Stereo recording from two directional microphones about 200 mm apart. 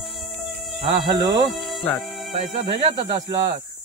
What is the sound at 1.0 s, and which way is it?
Speech, 20° right (ahead or behind).